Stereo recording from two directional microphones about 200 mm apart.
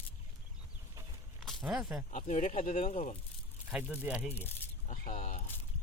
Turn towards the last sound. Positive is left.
turn(degrees=40)  # may be behind; listen again after turning